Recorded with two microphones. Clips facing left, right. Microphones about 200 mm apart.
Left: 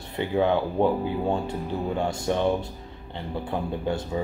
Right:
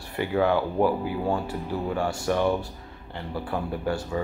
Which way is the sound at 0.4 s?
20° left (ahead or behind).